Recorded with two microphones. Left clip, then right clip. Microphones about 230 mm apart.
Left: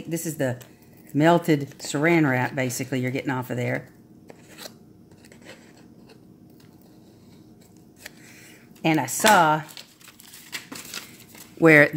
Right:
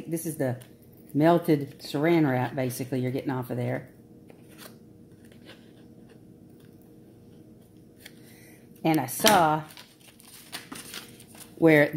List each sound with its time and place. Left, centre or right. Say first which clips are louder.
0.1 s speech: left 3 dB; left
8.8 s speech: left 3 dB; left
11.6 s speech: left 5 dB; left